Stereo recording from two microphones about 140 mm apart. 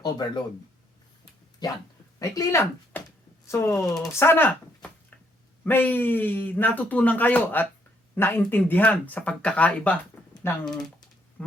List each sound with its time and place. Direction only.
0.0 s speech: 30° left (ahead or behind)
1.2 s a sound: 25° left (ahead or behind)
2.1 s speech: 20° left (ahead or behind)